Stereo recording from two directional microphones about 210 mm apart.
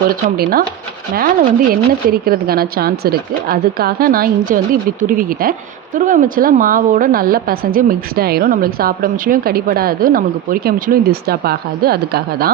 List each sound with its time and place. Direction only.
1.1 s a woman's voice: 45° right (ahead or behind)